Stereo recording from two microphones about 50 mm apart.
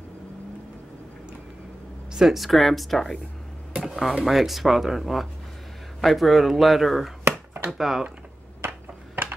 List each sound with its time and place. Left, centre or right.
2.1 s speech: centre
3.8 s a sound: centre
4.2 s speech: centre
7.2 s chopping: right
7.7 s speech: centre
8.6 s a sound: right